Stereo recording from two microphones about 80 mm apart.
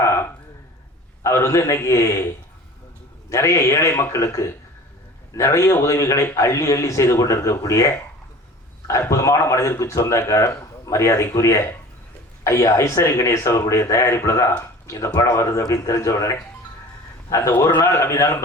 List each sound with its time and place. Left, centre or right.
0.0 s a sound: left
1.2 s a man's voice: left
8.9 s a man's voice: left